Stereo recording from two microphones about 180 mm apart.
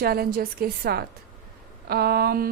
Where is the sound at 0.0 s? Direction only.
60° right (ahead or behind).